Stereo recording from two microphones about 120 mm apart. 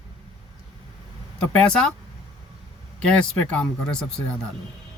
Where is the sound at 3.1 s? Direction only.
10° left (ahead or behind).